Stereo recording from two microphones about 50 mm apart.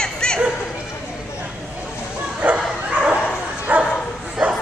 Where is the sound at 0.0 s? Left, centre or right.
Centre.